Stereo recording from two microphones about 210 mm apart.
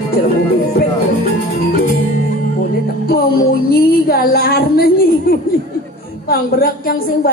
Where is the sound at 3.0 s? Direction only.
45° left (ahead or behind).